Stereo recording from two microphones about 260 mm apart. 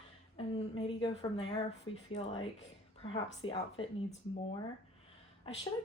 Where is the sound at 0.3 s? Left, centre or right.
Left.